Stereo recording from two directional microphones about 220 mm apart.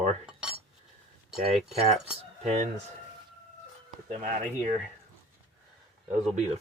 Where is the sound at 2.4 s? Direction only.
30° right (ahead or behind).